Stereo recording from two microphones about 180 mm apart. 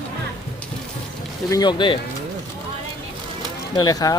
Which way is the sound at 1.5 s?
20° left (ahead or behind).